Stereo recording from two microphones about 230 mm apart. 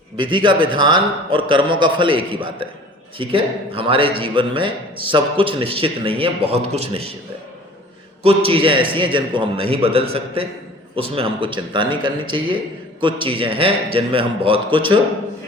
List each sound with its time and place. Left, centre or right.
0.2 s a man's voice: right
8.2 s a man's voice: right